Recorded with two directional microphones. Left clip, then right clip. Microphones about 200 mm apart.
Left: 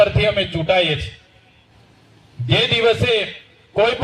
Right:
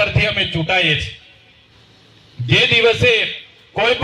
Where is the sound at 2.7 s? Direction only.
50° left (ahead or behind).